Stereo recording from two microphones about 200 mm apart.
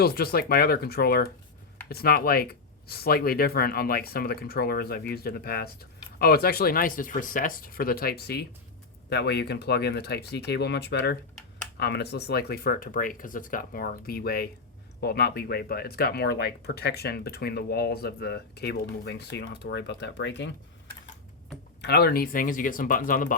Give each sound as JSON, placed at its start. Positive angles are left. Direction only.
{"t": 0.0, "sound": "speech", "side_deg": 50}
{"t": 21.8, "sound": "speech", "side_deg": 55}